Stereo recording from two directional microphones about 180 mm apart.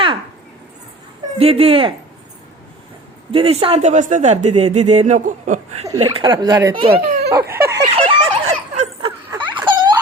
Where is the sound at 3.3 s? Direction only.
30° right (ahead or behind).